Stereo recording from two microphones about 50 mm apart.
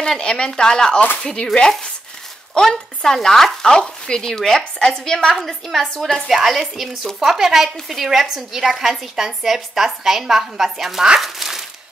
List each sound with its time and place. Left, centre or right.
0.0 s a woman's voice: centre
11.1 s crumpling: centre